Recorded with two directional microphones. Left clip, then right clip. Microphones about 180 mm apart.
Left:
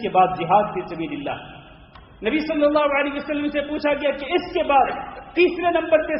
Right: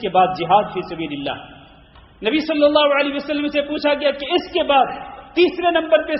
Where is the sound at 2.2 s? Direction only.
30° right (ahead or behind).